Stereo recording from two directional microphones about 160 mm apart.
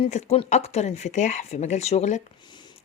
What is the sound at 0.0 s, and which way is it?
Speech, 40° left (ahead or behind).